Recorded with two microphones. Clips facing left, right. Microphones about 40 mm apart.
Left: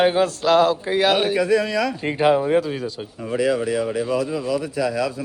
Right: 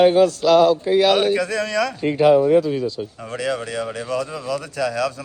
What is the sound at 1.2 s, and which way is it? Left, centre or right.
A man's voice, centre.